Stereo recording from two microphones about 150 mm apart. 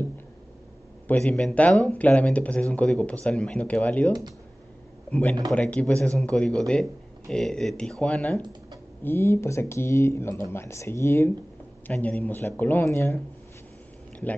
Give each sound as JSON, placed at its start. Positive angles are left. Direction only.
{"t": 1.0, "sound": "speech", "side_deg": 10}
{"t": 5.5, "sound": "speech", "side_deg": 10}